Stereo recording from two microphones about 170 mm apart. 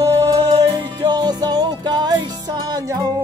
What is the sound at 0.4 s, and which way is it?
Music, 30° right (ahead or behind).